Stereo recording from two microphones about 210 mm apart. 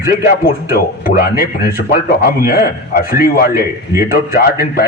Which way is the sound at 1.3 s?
45° left (ahead or behind).